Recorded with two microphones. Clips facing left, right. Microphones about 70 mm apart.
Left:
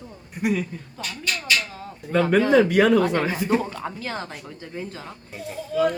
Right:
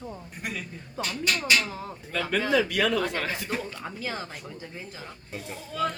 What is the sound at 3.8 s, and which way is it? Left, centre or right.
Speech, centre.